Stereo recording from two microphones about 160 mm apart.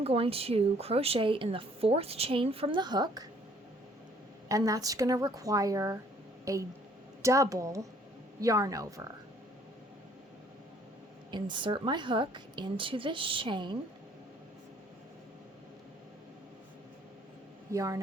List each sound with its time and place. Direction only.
0.0 s a woman's voice: 35° right (ahead or behind)
4.4 s a woman's voice: 20° right (ahead or behind)
11.3 s a woman's voice: 30° right (ahead or behind)
17.7 s speech: 20° right (ahead or behind)